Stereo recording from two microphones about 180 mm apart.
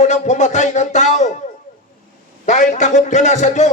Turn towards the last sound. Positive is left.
turn(degrees=40)  # may be behind; listen again after turning